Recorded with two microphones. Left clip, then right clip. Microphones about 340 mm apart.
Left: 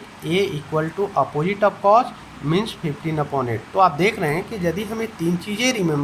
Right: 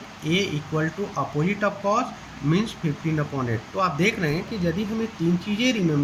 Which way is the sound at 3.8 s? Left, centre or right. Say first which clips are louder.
Left 6 dB; centre.